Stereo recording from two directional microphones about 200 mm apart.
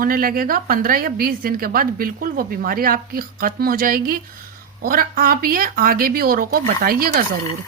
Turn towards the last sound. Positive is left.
turn(degrees=-45)  # may be behind; listen again after turning